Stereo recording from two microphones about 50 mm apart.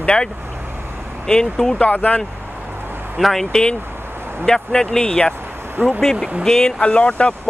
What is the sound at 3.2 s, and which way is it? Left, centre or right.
Speech, centre.